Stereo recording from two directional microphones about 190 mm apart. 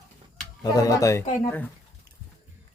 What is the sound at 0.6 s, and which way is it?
Speech, 20° left (ahead or behind).